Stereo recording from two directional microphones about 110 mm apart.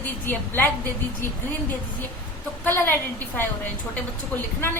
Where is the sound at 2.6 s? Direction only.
20° left (ahead or behind).